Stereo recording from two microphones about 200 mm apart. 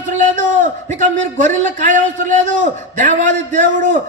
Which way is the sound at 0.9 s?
40° right (ahead or behind).